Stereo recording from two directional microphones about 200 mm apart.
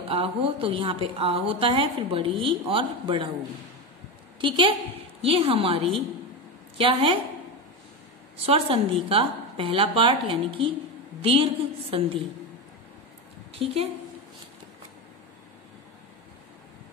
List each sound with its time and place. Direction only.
0.1 s a woman's voice: 25° right (ahead or behind)
4.4 s a woman's voice: 25° right (ahead or behind)
8.4 s a woman's voice: 30° right (ahead or behind)
13.5 s a woman's voice: 30° right (ahead or behind)